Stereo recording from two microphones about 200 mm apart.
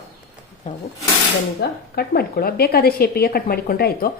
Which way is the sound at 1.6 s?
50° left (ahead or behind).